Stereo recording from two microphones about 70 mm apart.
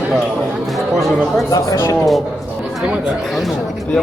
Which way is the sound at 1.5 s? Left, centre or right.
Left.